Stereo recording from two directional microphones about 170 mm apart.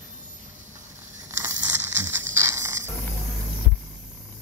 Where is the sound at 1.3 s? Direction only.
15° right (ahead or behind).